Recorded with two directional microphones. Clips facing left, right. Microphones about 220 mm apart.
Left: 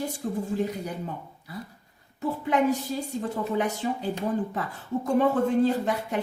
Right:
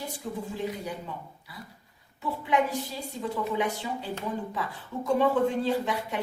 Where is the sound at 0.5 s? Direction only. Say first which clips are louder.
Left 4 dB; 45° left (ahead or behind).